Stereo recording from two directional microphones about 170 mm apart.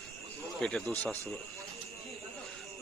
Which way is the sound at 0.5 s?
5° left (ahead or behind).